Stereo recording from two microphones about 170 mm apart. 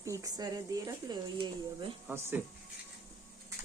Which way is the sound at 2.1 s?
15° right (ahead or behind).